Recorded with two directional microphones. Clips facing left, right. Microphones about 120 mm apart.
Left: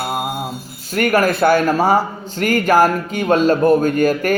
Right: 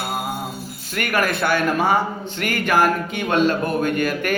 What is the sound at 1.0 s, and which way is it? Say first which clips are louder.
Speech: left 7 dB; 40° left (ahead or behind).